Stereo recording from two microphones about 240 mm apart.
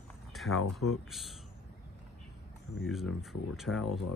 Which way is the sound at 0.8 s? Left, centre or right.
Left.